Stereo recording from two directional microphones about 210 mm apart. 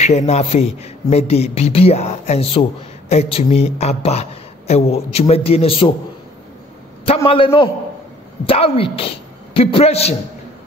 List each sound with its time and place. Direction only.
0.0 s a man's voice: 30° left (ahead or behind)
7.2 s a woman's voice: 25° left (ahead or behind)